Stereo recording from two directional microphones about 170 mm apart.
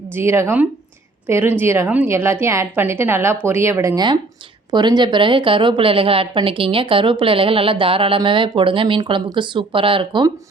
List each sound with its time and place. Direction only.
0.1 s a woman's voice: 15° right (ahead or behind)